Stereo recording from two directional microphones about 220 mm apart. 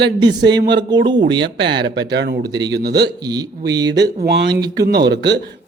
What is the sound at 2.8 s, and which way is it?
Speech, 50° right (ahead or behind).